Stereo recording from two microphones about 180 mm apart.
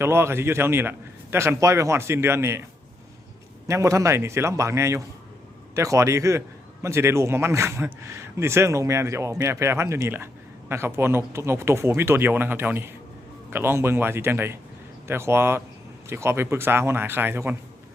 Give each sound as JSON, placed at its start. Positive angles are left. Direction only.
{"t": 0.0, "sound": "a man's voice", "side_deg": -15}
{"t": 3.7, "sound": "a man's voice", "side_deg": -15}